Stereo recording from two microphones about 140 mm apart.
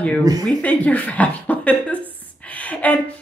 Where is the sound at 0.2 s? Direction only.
25° right (ahead or behind).